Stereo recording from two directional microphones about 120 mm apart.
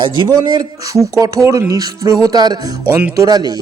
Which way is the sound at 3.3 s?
35° right (ahead or behind).